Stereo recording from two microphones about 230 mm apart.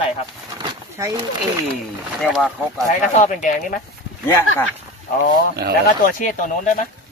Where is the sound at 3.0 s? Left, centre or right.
Left.